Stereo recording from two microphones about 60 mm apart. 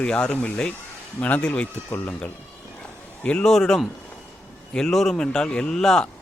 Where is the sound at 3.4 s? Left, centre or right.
Centre.